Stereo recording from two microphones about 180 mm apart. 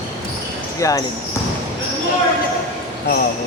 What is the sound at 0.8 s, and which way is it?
Speech, 15° left (ahead or behind).